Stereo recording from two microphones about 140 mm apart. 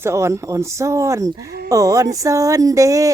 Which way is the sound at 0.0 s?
20° right (ahead or behind).